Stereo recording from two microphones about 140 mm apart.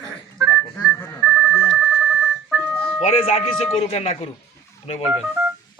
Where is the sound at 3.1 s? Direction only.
45° left (ahead or behind).